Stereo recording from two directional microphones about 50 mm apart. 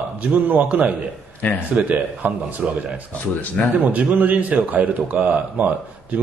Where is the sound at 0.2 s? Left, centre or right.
Right.